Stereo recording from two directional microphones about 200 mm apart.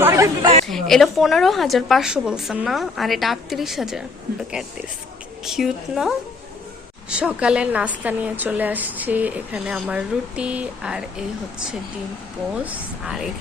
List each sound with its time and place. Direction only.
0.0 s chatter: 15° right (ahead or behind)
0.7 s a woman's voice: centre (ahead or behind)
12.5 s a woman's voice: 5° right (ahead or behind)